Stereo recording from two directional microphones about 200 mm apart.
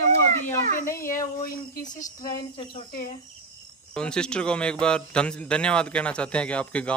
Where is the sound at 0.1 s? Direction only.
10° left (ahead or behind).